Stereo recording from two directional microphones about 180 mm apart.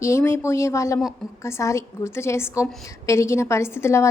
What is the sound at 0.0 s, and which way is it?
A woman's voice, 15° left (ahead or behind).